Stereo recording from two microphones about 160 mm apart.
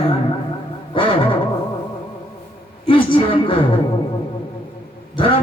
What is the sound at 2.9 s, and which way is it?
Speech, 30° left (ahead or behind).